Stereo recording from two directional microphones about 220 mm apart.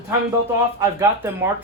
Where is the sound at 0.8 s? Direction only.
10° right (ahead or behind).